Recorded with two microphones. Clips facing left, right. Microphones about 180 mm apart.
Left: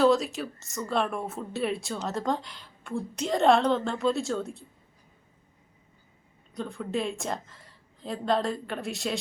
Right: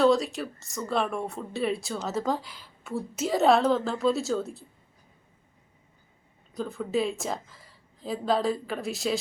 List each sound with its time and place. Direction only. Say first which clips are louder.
0.0 s speech: even; centre (ahead or behind)
6.5 s speech: right 3 dB; centre (ahead or behind)